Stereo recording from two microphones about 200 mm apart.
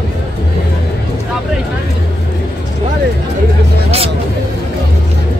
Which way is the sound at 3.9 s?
30° right (ahead or behind).